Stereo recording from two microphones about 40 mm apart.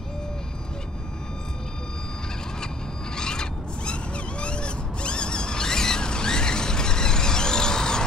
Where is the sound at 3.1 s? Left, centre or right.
Centre.